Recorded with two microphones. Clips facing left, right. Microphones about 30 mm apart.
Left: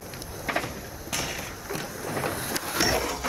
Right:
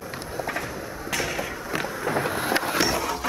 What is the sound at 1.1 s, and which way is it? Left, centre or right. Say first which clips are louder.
Vehicle: right 4 dB; right.